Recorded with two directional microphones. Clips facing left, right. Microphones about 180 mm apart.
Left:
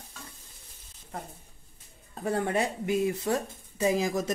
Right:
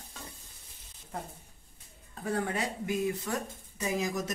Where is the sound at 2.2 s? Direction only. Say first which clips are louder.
Left 4 dB; 30° left (ahead or behind).